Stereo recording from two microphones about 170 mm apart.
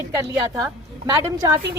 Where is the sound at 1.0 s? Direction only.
20° right (ahead or behind).